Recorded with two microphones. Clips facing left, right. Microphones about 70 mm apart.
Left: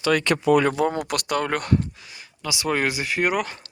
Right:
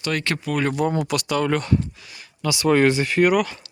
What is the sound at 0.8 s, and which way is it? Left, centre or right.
Speech, left.